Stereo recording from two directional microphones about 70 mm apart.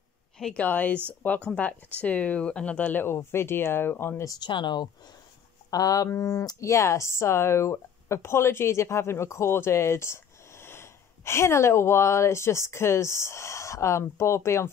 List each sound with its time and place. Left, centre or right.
0.4 s speech: centre
0.7 s speech: left
4.4 s speech: left
5.7 s speech: left